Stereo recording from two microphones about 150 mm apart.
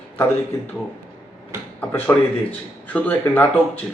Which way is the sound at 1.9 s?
10° left (ahead or behind).